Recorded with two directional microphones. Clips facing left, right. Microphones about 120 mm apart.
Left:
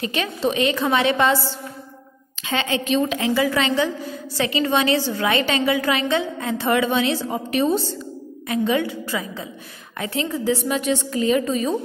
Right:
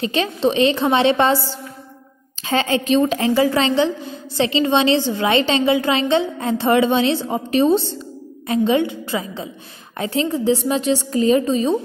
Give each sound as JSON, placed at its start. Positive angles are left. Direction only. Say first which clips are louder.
{"t": 0.0, "sound": "a woman's voice", "louder": "right 4 dB", "side_deg": -30}